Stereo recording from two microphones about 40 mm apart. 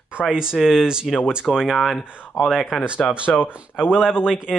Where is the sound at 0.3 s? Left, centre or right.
Centre.